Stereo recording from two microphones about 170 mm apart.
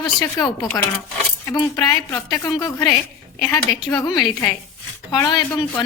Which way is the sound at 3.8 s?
25° left (ahead or behind).